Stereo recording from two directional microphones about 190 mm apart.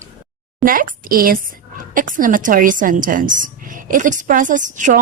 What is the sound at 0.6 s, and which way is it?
A woman's voice, 45° right (ahead or behind).